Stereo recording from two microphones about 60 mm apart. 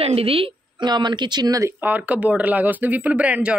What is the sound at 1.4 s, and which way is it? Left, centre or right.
Speech, right.